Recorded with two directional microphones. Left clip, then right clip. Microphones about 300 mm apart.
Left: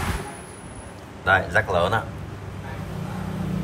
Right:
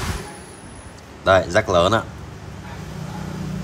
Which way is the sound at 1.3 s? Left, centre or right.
Centre.